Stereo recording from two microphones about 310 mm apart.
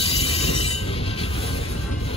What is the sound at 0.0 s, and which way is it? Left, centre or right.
Train, centre.